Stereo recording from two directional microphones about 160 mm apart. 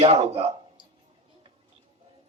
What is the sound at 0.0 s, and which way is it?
Speech, 40° right (ahead or behind).